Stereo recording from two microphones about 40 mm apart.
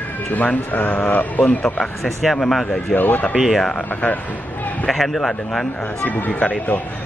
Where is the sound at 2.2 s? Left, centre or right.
Centre.